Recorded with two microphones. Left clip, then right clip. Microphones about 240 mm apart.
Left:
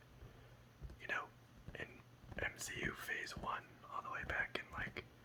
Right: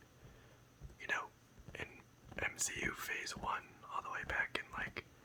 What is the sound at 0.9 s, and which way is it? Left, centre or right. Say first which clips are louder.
Whispering: right 3 dB; centre.